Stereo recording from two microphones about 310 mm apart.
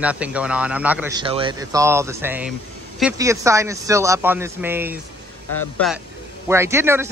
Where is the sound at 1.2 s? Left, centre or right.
Centre.